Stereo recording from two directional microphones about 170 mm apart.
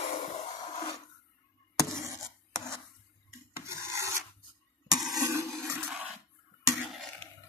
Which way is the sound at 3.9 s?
15° right (ahead or behind).